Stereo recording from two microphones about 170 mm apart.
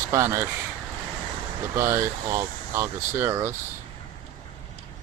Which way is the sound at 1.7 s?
15° right (ahead or behind).